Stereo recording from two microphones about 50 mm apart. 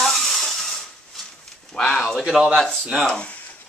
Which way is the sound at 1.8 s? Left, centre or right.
Centre.